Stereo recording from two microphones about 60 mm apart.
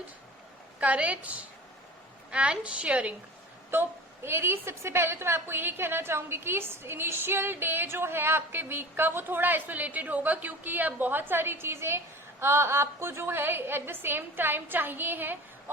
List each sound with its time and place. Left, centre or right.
0.8 s a woman's voice: right
3.7 s a woman's voice: right